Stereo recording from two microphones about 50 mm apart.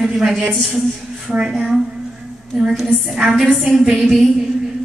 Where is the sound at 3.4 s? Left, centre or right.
Centre.